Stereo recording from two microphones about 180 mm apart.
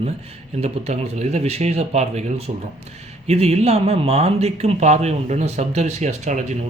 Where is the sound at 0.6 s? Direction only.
35° right (ahead or behind).